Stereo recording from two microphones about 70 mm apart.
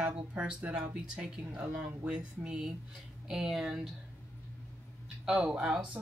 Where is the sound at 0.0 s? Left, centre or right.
Centre.